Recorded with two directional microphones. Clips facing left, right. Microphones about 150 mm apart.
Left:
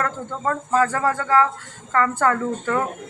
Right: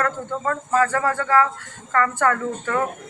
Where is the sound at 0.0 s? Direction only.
20° left (ahead or behind).